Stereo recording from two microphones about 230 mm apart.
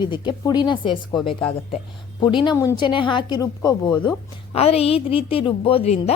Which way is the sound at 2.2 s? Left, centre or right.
Centre.